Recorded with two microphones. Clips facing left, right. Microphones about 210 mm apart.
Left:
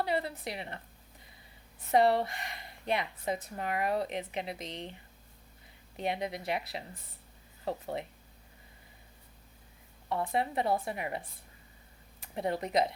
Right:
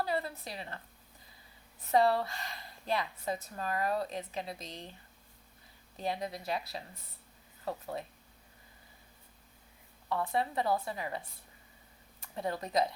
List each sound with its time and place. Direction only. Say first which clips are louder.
0.0 s a woman's voice: left 2 dB; 25° left (ahead or behind)
1.9 s a woman's voice: left 2 dB; 20° left (ahead or behind)
6.0 s a woman's voice: left 2 dB; 20° left (ahead or behind)
10.1 s a woman's voice: left 1 dB; 20° left (ahead or behind)
12.3 s a woman's voice: left 3 dB; 20° left (ahead or behind)